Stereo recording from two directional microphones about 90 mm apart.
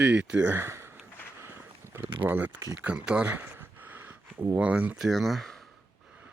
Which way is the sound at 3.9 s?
20° right (ahead or behind).